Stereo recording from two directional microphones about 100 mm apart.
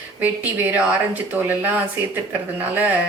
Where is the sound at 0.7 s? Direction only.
15° right (ahead or behind).